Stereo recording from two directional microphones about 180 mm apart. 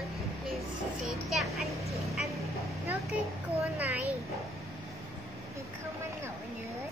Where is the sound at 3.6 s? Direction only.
10° right (ahead or behind).